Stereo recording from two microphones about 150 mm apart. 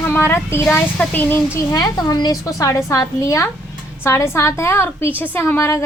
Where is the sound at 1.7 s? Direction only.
25° left (ahead or behind).